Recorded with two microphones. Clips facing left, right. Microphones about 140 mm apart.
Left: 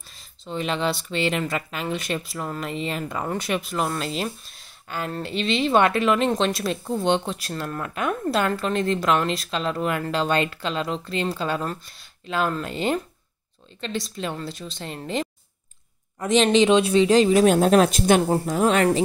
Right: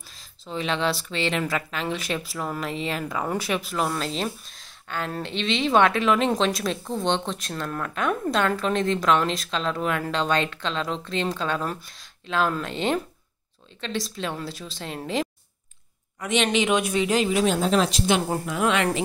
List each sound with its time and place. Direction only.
0.5 s speech: centre (ahead or behind)
16.2 s speech: 35° left (ahead or behind); by 18.2 s 50° left (ahead or behind)
18.3 s speech: 35° left (ahead or behind)